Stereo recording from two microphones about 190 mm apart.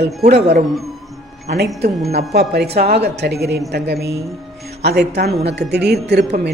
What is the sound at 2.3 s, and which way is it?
A woman's voice, 60° right (ahead or behind).